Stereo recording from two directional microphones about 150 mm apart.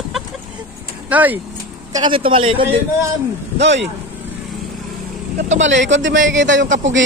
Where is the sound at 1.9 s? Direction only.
35° right (ahead or behind).